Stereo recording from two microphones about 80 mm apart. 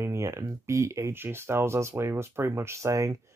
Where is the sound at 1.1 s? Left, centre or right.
Right.